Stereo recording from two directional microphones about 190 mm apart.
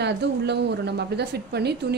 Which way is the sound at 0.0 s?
65° right (ahead or behind).